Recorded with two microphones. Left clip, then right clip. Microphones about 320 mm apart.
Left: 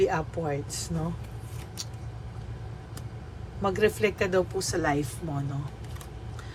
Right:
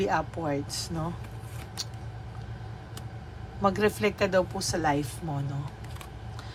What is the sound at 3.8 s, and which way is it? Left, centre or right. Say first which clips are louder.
Speech: left 1 dB; centre.